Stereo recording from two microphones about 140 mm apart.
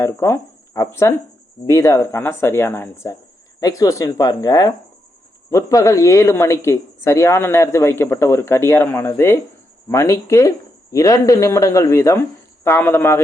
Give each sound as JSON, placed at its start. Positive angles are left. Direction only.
{"t": 0.0, "sound": "a man's voice", "side_deg": 20}